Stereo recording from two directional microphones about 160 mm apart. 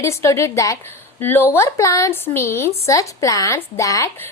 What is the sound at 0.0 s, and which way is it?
A woman's voice, 20° left (ahead or behind).